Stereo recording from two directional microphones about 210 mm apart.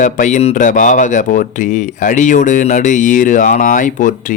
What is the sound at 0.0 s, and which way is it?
Speech, 35° left (ahead or behind).